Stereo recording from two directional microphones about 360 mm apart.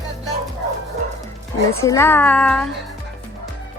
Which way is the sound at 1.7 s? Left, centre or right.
Centre.